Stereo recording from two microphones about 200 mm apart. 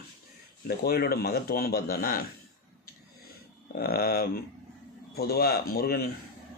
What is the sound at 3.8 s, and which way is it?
A man's voice, 50° left (ahead or behind).